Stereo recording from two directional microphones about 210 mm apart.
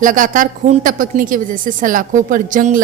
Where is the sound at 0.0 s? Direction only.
40° right (ahead or behind).